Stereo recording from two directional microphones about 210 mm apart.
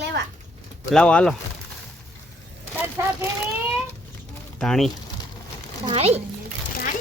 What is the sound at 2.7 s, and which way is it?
Vehicle, 10° right (ahead or behind).